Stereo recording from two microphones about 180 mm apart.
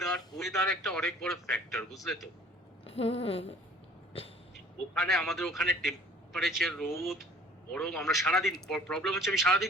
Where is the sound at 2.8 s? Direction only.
30° left (ahead or behind).